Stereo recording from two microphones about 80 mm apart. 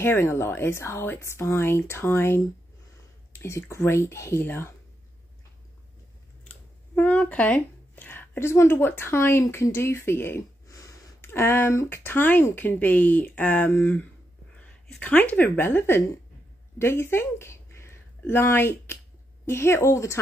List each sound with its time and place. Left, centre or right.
0.0 s speech: left
7.0 s speech: centre
10.7 s a sound: left
11.1 s speech: left
14.7 s speech: centre; by 20.2 s left